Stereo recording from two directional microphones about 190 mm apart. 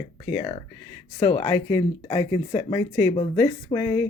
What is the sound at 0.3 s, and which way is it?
Speech, 20° left (ahead or behind).